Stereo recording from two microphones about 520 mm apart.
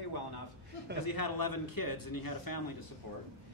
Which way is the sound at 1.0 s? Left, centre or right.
Left.